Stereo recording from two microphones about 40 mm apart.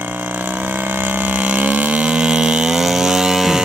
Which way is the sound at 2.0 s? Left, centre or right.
Right.